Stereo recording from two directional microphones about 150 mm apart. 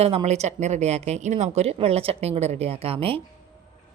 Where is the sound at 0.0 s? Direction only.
40° right (ahead or behind).